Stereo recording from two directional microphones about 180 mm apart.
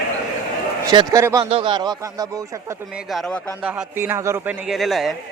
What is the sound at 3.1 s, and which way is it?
Speech, centre (ahead or behind).